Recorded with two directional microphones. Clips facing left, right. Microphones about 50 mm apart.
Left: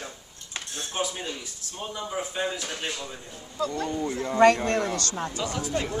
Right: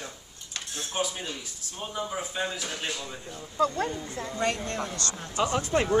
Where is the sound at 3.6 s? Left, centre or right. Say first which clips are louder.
Right 4 dB; right.